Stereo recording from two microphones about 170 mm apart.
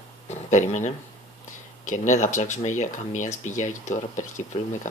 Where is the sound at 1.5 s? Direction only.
45° left (ahead or behind).